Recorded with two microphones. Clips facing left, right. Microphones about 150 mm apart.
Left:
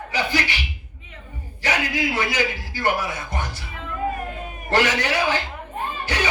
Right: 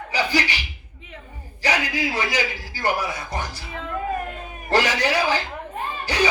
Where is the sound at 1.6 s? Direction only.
35° right (ahead or behind).